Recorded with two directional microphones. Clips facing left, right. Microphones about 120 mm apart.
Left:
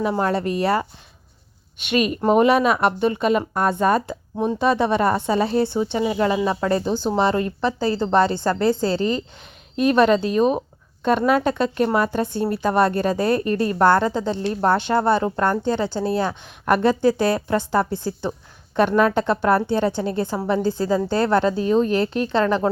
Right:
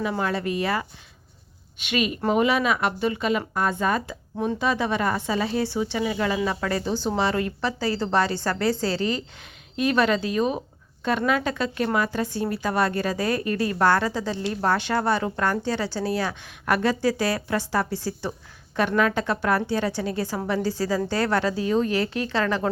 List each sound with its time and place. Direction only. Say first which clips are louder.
0.0 s speech: left 5 dB; 40° left (ahead or behind)
1.9 s a woman's voice: left 5 dB; 40° left (ahead or behind); by 9.2 s 20° left (ahead or behind)
9.7 s a woman's voice: left 5 dB; 35° left (ahead or behind)
18.8 s a woman's voice: left 5 dB; 35° left (ahead or behind)